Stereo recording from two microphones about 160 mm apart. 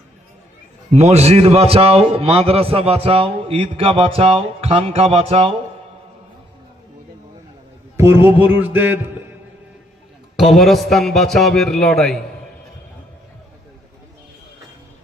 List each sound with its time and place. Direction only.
0.9 s a man's voice: 45° right (ahead or behind)
7.9 s a man's voice: 15° right (ahead or behind)
8.4 s a sound: 10° right (ahead or behind)
10.3 s a man's voice: centre (ahead or behind)